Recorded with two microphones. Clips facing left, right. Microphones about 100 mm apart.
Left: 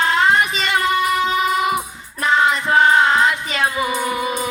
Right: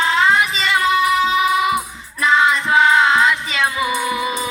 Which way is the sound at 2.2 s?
50° left (ahead or behind).